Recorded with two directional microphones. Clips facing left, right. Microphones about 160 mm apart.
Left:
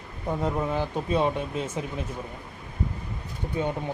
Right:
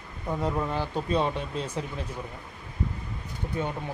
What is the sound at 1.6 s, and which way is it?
Speech, 25° left (ahead or behind).